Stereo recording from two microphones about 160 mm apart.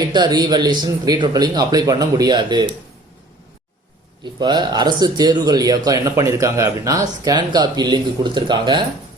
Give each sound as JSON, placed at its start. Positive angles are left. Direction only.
{"t": 0.1, "sound": "speech", "side_deg": -25}
{"t": 4.2, "sound": "speech", "side_deg": -30}